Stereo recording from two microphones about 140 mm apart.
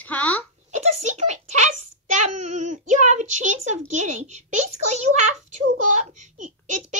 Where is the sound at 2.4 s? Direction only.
55° right (ahead or behind).